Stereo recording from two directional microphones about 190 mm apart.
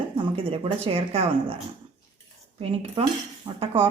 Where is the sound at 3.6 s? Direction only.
25° right (ahead or behind).